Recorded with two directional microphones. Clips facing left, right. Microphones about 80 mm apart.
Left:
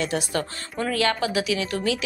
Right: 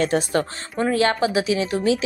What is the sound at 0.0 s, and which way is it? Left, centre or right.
A woman's voice, right.